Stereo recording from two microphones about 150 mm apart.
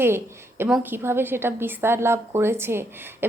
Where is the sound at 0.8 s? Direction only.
15° right (ahead or behind).